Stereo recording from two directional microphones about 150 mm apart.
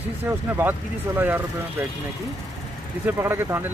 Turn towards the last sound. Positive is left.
turn(degrees=-15)  # may be behind; listen again after turning